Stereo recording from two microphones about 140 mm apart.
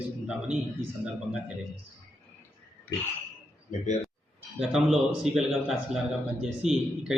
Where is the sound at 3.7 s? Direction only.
55° left (ahead or behind).